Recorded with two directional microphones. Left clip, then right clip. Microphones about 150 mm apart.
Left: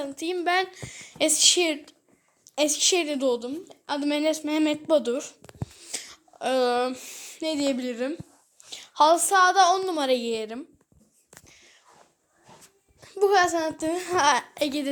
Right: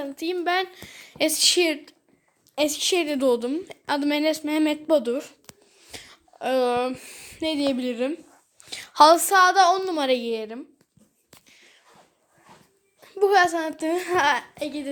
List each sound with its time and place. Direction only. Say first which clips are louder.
0.0 s a woman's voice: right 1 dB; 10° right (ahead or behind)
3.2 s a woman's voice: right 4 dB; 40° right (ahead or behind)
4.0 s a woman's voice: even; 10° right (ahead or behind)
5.5 s a sound: left 5 dB; centre (ahead or behind)
6.9 s a woman's voice: even; 15° right (ahead or behind)
8.6 s a sound: right 5 dB; 30° right (ahead or behind)
9.1 s a woman's voice: right 2 dB; 15° right (ahead or behind); by 10.7 s centre (ahead or behind)
11.4 s whispering: right 1 dB; centre (ahead or behind)
13.0 s a woman's voice: right 2 dB; 5° right (ahead or behind)
13.8 s a woman's voice: right 3 dB; 15° right (ahead or behind)
14.5 s a woman's voice: left 4 dB; 90° left